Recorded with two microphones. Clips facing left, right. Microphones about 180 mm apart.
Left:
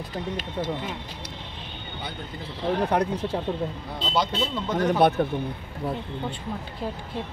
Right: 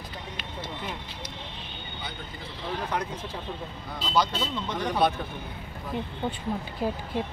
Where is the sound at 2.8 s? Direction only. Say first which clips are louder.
Left 8 dB; 65° left (ahead or behind).